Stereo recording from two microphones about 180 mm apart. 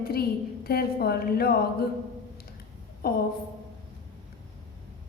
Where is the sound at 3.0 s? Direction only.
60° left (ahead or behind).